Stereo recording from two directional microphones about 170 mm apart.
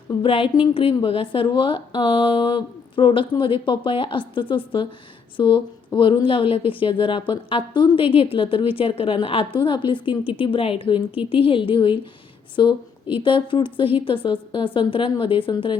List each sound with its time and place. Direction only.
0.2 s a woman's voice: 30° left (ahead or behind)